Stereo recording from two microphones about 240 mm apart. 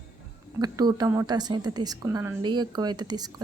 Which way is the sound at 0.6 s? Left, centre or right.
Centre.